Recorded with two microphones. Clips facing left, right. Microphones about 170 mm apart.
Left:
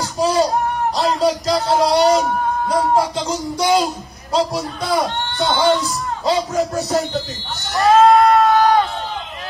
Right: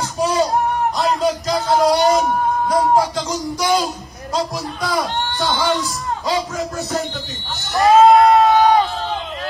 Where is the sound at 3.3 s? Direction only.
20° left (ahead or behind).